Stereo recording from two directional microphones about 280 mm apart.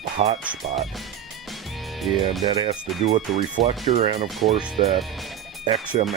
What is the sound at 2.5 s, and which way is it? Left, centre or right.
Speech, centre.